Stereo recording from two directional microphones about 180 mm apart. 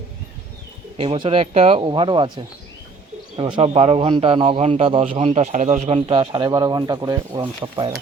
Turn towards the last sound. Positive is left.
turn(degrees=-25)  # may be behind; listen again after turning